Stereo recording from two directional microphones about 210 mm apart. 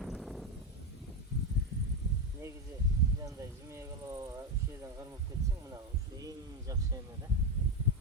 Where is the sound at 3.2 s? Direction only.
15° right (ahead or behind).